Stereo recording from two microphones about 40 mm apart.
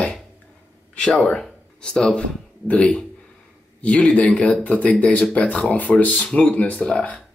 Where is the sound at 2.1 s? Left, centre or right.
Left.